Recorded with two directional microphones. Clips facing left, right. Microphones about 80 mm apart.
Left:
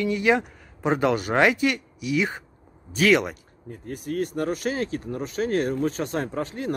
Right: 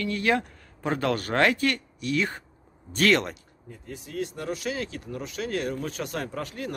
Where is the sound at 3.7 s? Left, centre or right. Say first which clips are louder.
Left 7 dB; left.